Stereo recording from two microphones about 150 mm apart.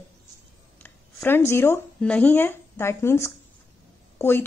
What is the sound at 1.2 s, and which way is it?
A woman's voice, 15° left (ahead or behind).